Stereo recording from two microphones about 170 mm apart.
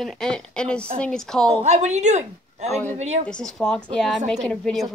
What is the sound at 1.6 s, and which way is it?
A woman's voice, 40° right (ahead or behind).